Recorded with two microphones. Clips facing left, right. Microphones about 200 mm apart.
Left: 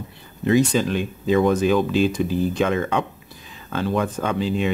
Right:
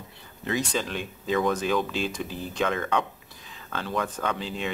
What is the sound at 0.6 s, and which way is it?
Speech, 5° left (ahead or behind).